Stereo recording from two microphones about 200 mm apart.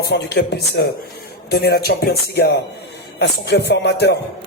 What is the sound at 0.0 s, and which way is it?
Speech, 55° left (ahead or behind).